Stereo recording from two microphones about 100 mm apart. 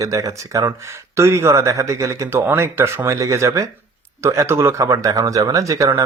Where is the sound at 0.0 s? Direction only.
35° right (ahead or behind).